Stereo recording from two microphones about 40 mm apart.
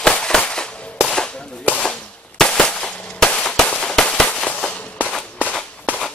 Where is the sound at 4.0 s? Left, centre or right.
Left.